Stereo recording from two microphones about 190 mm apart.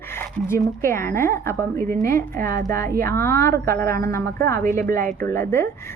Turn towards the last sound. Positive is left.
turn(degrees=15)  # may be behind; listen again after turning